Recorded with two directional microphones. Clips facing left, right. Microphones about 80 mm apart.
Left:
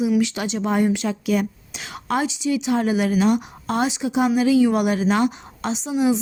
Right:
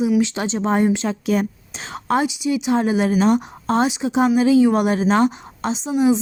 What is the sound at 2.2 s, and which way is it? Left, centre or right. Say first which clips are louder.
A woman's voice: right 2 dB; centre.